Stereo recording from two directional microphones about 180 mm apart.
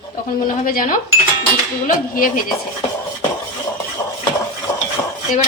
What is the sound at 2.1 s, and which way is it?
Speech, 50° left (ahead or behind).